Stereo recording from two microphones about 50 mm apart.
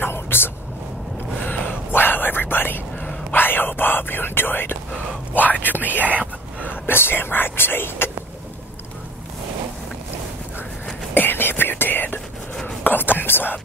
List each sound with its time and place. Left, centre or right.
0.0 s a sound: left
1.4 s whispering: left
5.3 s speech: left
5.9 s whispering: right
6.7 s speech: left
11.1 s whispering: left
12.8 s speech: left